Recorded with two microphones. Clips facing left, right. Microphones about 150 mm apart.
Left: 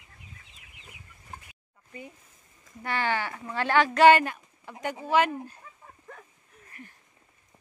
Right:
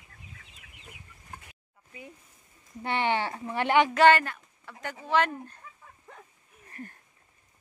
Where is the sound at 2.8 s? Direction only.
25° right (ahead or behind).